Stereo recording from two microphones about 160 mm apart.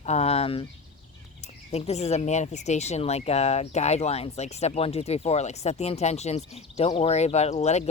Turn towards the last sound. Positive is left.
turn(degrees=45)  # may be behind; listen again after turning